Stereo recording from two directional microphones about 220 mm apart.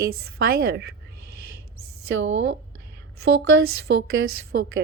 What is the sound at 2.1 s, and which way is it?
Speech, 55° right (ahead or behind).